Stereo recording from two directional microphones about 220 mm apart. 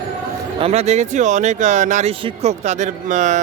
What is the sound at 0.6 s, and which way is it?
A man's voice, 30° right (ahead or behind).